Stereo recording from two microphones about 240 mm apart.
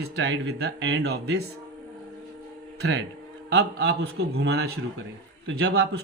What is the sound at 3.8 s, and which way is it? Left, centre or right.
Speech, right.